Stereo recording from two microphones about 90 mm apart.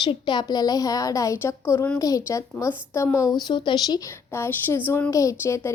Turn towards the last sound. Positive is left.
turn(degrees=35)  # may be behind; listen again after turning